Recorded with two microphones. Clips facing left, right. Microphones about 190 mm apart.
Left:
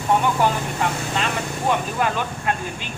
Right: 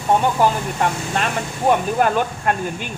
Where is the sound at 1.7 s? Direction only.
45° right (ahead or behind).